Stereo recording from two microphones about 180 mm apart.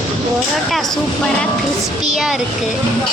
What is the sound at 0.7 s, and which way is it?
Speech, centre (ahead or behind).